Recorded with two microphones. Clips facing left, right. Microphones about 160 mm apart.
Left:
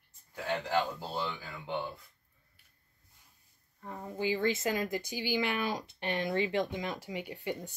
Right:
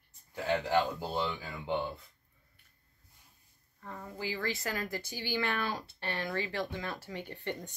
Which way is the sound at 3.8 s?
20° left (ahead or behind).